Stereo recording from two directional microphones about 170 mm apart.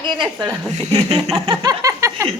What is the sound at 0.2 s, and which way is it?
Speech, 5° right (ahead or behind).